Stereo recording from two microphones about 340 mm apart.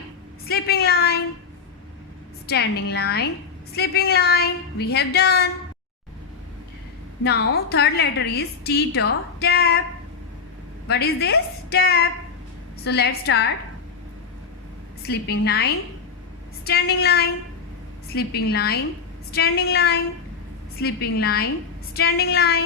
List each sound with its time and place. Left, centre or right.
0.4 s a woman's voice: left
2.5 s a woman's voice: left
7.3 s a woman's voice: left
10.8 s a woman's voice: left
15.0 s a woman's voice: left